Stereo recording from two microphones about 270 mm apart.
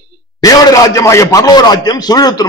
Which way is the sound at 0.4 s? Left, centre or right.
Centre.